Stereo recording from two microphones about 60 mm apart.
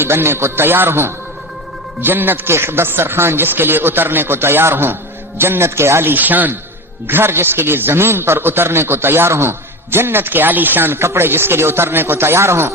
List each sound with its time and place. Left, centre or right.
0.0 s a man's voice: right
7.1 s a man's voice: right